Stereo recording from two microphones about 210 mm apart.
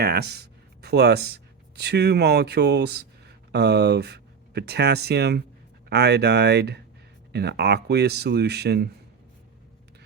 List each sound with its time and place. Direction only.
0.0 s speech: 50° right (ahead or behind)